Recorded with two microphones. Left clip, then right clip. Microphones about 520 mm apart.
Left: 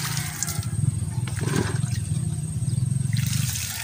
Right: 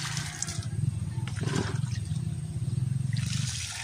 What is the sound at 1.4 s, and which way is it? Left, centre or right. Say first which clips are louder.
Wild animals: left 5 dB; right.